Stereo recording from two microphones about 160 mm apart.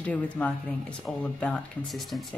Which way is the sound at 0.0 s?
5° left (ahead or behind).